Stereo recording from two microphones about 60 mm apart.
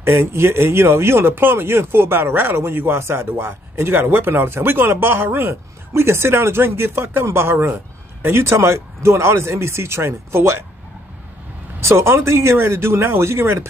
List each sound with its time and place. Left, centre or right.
0.0 s speech: right
11.8 s speech: right